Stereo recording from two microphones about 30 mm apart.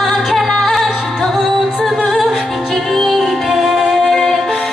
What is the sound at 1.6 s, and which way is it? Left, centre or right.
Music, centre.